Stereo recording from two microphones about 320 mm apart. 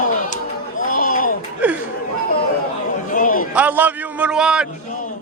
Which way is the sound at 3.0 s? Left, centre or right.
Left.